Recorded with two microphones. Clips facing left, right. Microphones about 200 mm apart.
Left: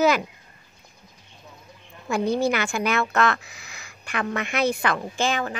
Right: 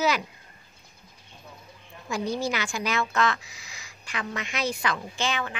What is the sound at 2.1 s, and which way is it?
A woman's voice, 60° left (ahead or behind).